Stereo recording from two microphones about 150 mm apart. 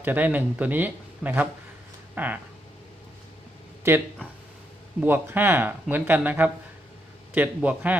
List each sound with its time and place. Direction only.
0.0 s speech: 10° right (ahead or behind)
3.9 s speech: 15° right (ahead or behind)